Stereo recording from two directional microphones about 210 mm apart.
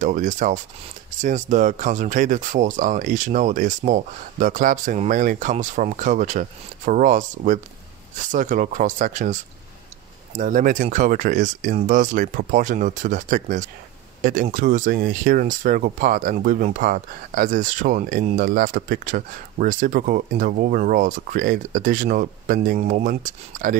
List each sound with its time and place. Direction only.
0.0 s speech: 40° right (ahead or behind)